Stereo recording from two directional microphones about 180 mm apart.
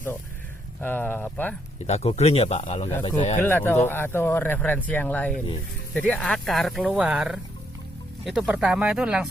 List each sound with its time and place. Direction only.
0.8 s speech: 10° left (ahead or behind)
1.9 s speech: 35° left (ahead or behind)
3.3 s speech: 10° left (ahead or behind); by 9.3 s 5° right (ahead or behind)